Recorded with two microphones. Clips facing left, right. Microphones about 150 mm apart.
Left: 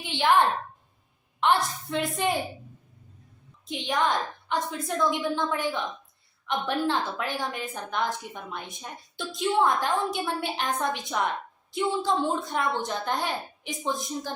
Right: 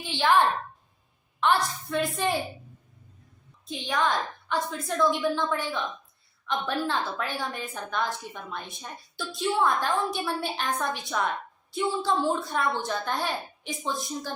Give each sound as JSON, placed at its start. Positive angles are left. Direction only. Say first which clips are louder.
{"t": 0.0, "sound": "a woman's voice", "louder": "even", "side_deg": 15}
{"t": 3.7, "sound": "a woman's voice", "louder": "left 1 dB", "side_deg": 20}